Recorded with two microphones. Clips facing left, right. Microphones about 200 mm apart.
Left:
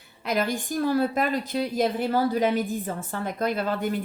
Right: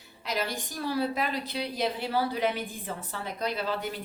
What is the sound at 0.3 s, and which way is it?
A woman's voice, 50° left (ahead or behind).